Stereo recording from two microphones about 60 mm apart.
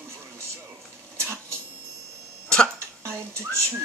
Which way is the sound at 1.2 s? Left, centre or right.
Right.